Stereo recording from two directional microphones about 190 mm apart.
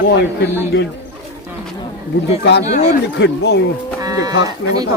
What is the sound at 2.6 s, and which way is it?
Speech, 35° left (ahead or behind).